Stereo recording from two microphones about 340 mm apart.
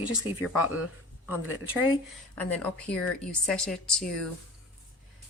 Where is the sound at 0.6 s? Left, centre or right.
Left.